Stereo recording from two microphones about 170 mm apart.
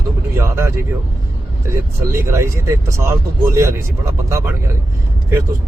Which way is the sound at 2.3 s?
15° right (ahead or behind).